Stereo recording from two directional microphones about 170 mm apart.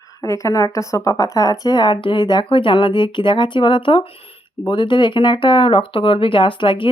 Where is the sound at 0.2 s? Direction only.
20° left (ahead or behind).